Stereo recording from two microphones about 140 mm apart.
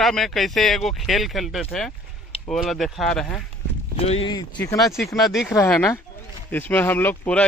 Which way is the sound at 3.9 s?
45° left (ahead or behind).